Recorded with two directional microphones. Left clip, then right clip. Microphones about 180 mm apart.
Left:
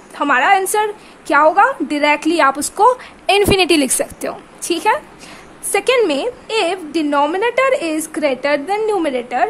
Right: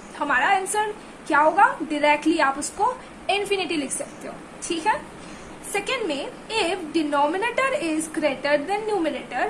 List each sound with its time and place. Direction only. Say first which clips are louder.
0.2 s a woman's voice: left 8 dB; 60° left (ahead or behind)